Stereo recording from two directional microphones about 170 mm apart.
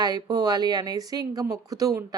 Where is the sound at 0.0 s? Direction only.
25° right (ahead or behind).